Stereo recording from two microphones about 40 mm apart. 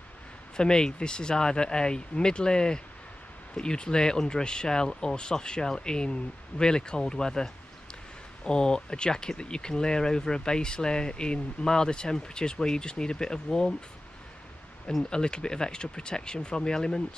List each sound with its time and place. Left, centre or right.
0.6 s speech: centre
15.0 s speech: left